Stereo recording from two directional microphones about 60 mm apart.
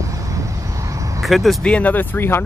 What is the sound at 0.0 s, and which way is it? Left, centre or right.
Vehicle, right.